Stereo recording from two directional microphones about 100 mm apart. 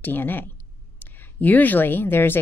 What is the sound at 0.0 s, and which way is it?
Speech, 20° left (ahead or behind).